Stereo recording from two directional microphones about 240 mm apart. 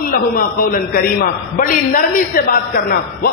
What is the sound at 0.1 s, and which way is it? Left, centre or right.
A man's voice, left.